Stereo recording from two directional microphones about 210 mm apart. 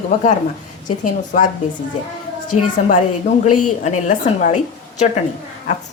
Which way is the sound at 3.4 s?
90° left.